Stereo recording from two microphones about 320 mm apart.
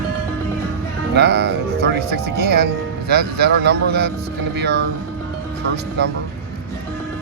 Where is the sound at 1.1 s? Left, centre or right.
Right.